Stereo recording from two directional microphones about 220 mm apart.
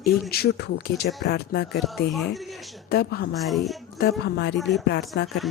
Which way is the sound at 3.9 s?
45° left (ahead or behind).